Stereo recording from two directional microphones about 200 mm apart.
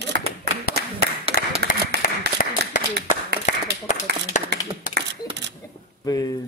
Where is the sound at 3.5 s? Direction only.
35° left (ahead or behind).